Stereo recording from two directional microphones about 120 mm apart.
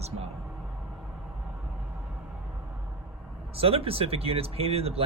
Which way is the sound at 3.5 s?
50° right (ahead or behind).